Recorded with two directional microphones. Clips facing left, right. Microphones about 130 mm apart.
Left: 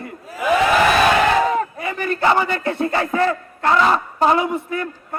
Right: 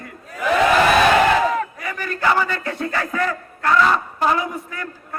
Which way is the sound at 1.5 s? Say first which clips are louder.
Left 3 dB; 30° left (ahead or behind).